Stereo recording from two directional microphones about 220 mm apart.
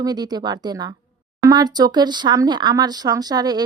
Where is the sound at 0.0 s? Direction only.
20° right (ahead or behind).